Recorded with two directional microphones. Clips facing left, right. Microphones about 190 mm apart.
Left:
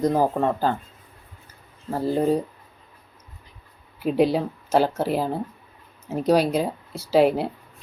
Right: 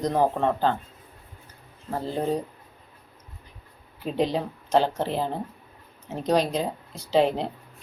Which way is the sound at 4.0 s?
10° left (ahead or behind).